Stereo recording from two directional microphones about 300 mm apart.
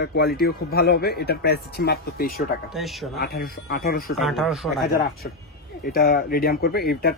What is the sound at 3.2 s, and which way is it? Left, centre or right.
Speech, left.